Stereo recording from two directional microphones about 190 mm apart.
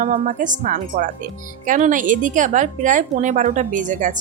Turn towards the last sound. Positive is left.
turn(degrees=-40)  # may be behind; listen again after turning